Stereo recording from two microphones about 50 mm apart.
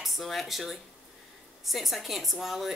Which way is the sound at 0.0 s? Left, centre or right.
Centre.